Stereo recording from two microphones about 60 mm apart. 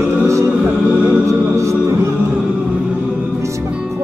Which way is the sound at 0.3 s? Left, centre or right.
Right.